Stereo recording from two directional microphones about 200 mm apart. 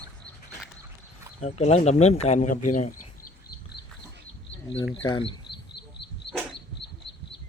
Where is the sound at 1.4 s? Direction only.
35° left (ahead or behind).